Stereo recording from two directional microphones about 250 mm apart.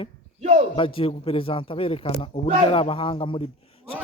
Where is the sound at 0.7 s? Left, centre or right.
Left.